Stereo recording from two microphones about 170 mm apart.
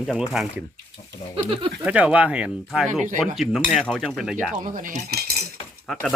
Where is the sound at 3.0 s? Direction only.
50° right (ahead or behind).